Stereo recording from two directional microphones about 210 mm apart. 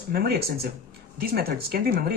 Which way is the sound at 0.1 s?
50° right (ahead or behind).